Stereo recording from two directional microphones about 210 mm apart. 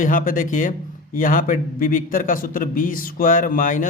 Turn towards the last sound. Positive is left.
turn(degrees=40)  # may be behind; listen again after turning